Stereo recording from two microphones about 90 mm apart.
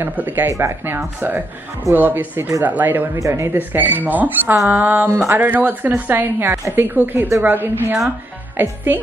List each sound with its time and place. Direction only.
0.0 s speech: 20° right (ahead or behind)
0.5 s speech: 30° right (ahead or behind)
3.2 s speech: 35° right (ahead or behind)